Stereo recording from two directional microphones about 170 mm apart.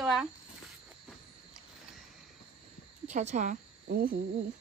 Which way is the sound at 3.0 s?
45° right (ahead or behind).